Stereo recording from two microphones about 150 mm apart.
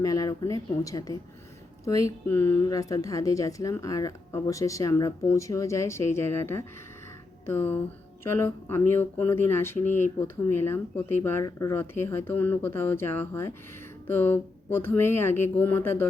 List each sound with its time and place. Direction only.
0.0 s a woman's voice: 25° left (ahead or behind)